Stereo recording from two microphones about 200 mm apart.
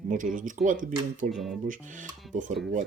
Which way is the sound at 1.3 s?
Centre (ahead or behind).